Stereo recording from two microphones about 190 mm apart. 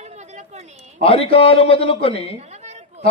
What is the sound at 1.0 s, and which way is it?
Speech, 30° left (ahead or behind).